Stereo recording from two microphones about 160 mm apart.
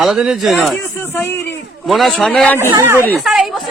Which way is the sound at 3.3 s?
Centre (ahead or behind).